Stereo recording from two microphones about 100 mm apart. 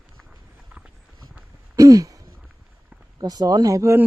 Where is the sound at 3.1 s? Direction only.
40° right (ahead or behind).